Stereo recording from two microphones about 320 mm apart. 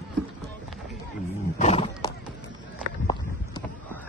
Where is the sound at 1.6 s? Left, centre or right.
Centre.